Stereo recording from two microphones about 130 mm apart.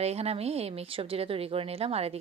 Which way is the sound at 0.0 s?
55° right (ahead or behind).